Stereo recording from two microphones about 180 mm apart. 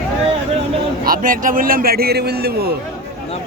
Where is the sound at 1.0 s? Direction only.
50° right (ahead or behind).